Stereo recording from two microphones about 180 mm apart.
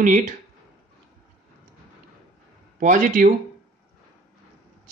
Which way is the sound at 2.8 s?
45° right (ahead or behind).